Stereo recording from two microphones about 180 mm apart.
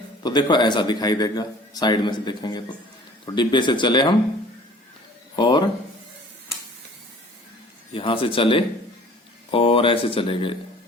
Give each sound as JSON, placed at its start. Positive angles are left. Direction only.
{"t": 0.2, "sound": "a man's voice", "side_deg": 25}
{"t": 5.4, "sound": "a man's voice", "side_deg": 25}
{"t": 7.9, "sound": "a man's voice", "side_deg": 30}